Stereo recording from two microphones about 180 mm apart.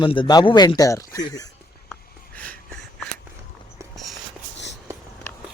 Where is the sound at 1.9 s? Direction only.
10° left (ahead or behind).